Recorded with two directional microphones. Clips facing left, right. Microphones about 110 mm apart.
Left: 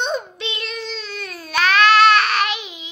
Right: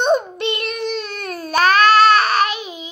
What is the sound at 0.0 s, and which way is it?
Child singing, 50° right (ahead or behind).